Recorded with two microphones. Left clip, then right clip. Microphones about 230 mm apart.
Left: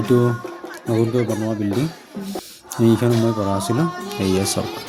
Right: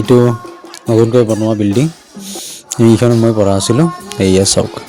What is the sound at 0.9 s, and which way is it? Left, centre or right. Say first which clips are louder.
Speech: right 10 dB; left.